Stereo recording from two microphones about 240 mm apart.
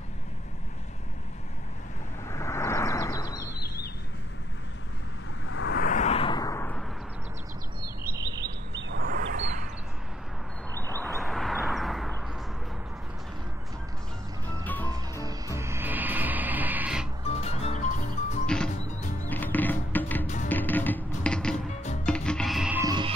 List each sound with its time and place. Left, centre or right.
2.3 s vehicle: centre
5.5 s a sound: left
5.8 s vehicle: left; by 6.8 s centre
8.2 s chirp: centre
8.5 s a sound: right
10.8 s a sound: centre
14.6 s music: centre
15.2 s music: centre
17.2 s music: left
19.2 s music: centre